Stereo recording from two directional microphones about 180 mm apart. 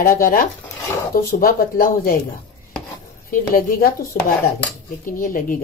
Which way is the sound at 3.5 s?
55° left (ahead or behind).